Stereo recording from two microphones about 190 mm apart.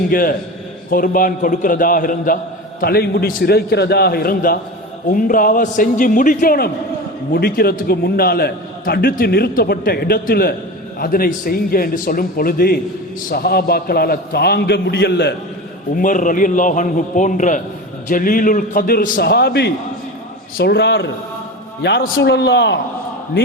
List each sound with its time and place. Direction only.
0.1 s a man's voice: 50° left (ahead or behind)
16.0 s a man's voice: 45° left (ahead or behind); by 22.8 s 65° left (ahead or behind)